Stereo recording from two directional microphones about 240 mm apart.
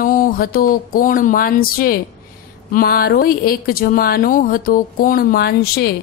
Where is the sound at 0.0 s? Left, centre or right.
Left.